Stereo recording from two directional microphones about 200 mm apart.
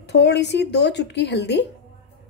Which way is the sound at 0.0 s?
60° left (ahead or behind).